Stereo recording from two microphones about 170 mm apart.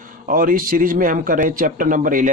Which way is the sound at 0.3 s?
55° right (ahead or behind).